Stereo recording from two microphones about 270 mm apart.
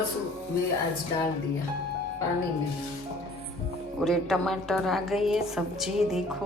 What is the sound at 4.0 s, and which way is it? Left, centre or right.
A woman's voice, centre.